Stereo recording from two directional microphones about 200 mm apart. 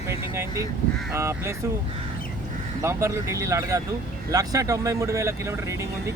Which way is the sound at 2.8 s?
15° right (ahead or behind).